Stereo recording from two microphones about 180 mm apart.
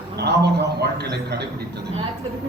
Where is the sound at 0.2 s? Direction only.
65° right (ahead or behind).